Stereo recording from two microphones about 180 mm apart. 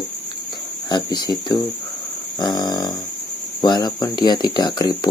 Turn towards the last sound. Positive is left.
turn(degrees=25)  # may be behind; listen again after turning